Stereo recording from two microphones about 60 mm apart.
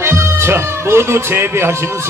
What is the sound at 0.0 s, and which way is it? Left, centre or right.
Speech, right.